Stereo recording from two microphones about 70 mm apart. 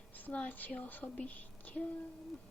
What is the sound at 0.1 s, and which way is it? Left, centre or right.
Speech, left.